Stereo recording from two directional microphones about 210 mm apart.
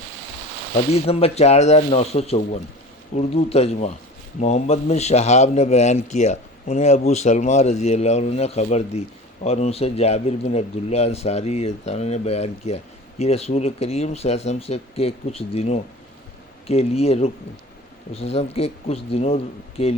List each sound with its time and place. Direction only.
0.9 s a man's voice: 30° left (ahead or behind)